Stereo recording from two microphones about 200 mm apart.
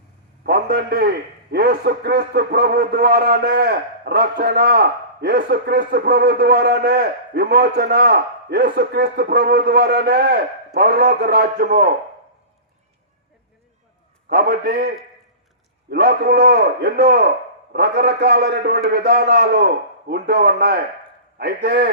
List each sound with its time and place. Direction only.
0.4 s a man's voice: 55° right (ahead or behind)
14.3 s a man's voice: 50° right (ahead or behind)